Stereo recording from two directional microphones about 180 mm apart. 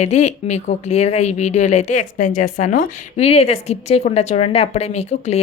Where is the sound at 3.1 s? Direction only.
35° left (ahead or behind).